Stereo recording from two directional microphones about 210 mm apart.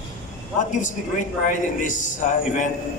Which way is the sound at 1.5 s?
35° left (ahead or behind).